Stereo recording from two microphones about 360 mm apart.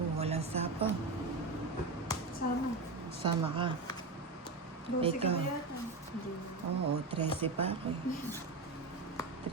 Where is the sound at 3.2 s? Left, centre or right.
Centre.